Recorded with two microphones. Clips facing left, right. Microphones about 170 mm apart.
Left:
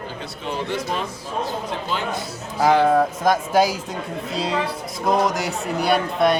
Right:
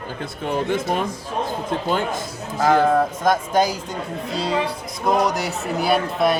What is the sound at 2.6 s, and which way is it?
Speech, 10° left (ahead or behind).